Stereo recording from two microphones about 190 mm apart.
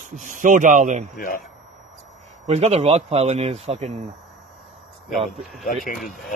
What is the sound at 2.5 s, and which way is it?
A man's voice, 35° right (ahead or behind).